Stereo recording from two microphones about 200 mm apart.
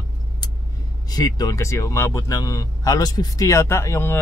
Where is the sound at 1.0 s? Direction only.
20° left (ahead or behind).